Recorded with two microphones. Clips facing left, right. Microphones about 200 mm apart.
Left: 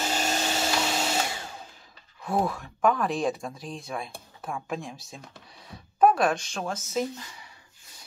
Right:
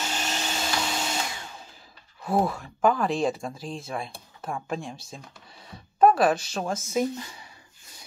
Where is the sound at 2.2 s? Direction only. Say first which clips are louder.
Right 2 dB; centre (ahead or behind).